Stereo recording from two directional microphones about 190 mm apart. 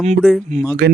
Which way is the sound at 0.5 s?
40° right (ahead or behind).